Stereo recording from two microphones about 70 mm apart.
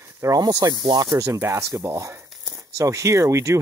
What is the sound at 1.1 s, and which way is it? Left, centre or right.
Speech, right.